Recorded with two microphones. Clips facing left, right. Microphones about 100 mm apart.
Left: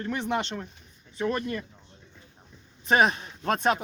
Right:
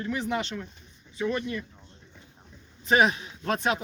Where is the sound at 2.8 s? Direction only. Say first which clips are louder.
Even; 40° left (ahead or behind).